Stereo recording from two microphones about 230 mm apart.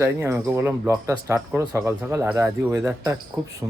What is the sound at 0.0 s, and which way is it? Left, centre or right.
A man's voice, centre.